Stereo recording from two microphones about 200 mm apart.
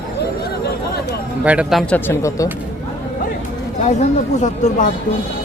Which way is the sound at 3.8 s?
35° left (ahead or behind).